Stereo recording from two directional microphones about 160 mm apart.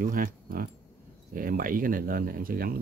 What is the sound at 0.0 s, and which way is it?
Speech, 60° right (ahead or behind).